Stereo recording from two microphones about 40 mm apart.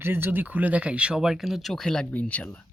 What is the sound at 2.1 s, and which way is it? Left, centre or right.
Speech, left.